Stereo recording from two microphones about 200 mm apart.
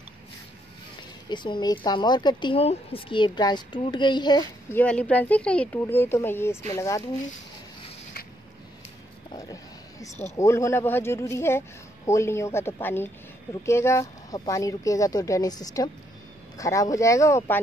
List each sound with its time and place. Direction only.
1.3 s speech: 20° left (ahead or behind)
4.7 s a woman's voice: 5° left (ahead or behind)
9.3 s a sound: 15° left (ahead or behind)
10.3 s a woman's voice: 15° left (ahead or behind)